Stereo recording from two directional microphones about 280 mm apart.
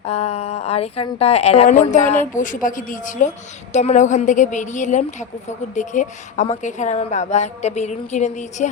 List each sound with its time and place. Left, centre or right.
0.0 s a woman's voice: left